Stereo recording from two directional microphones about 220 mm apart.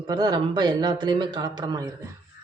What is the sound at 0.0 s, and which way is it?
A man's voice, 20° right (ahead or behind).